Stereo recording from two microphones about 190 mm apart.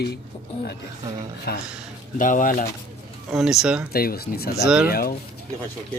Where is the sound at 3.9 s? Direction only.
50° left (ahead or behind).